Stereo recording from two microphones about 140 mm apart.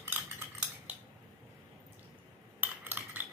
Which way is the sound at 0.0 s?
15° right (ahead or behind).